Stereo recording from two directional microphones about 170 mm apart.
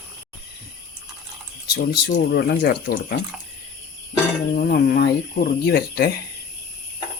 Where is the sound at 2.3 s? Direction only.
70° left (ahead or behind).